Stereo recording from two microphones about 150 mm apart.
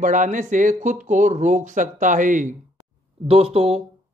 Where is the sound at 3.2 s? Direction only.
40° right (ahead or behind).